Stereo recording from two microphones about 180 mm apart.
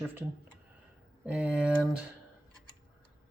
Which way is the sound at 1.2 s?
5° right (ahead or behind).